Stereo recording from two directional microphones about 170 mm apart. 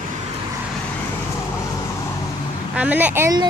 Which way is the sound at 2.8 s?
10° right (ahead or behind).